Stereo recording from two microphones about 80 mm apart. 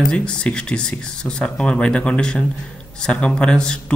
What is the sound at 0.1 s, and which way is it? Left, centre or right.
Speech, centre.